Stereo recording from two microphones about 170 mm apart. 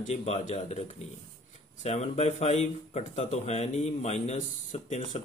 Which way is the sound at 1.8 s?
40° left (ahead or behind).